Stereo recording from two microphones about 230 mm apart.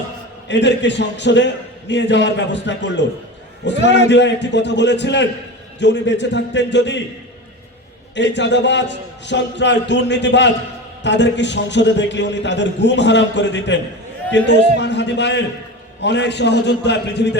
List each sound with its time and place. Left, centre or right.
0.4 s a man's voice: left
8.1 s a man's voice: left